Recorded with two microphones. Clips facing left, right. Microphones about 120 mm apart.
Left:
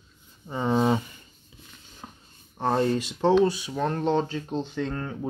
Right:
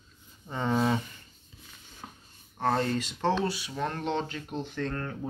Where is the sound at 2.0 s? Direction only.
5° left (ahead or behind).